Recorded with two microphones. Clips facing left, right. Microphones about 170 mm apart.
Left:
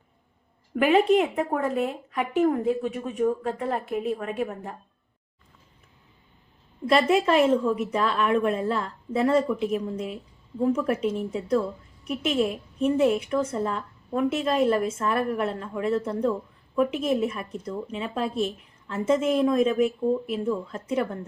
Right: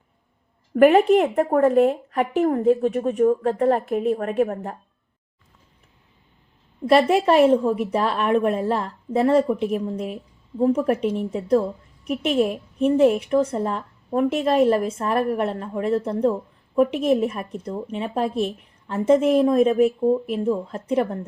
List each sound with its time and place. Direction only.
0.8 s a woman's voice: 50° right (ahead or behind)
6.9 s a woman's voice: 35° right (ahead or behind)
9.3 s a woman's voice: 45° right (ahead or behind)
13.1 s a woman's voice: 35° right (ahead or behind); by 18.5 s 50° right (ahead or behind)
18.9 s a woman's voice: 35° right (ahead or behind)
20.4 s a woman's voice: 35° right (ahead or behind)